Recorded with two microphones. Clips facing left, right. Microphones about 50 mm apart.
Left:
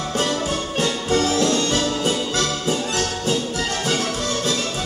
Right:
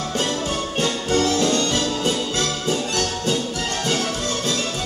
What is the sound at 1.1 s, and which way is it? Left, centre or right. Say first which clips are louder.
Music: even; centre.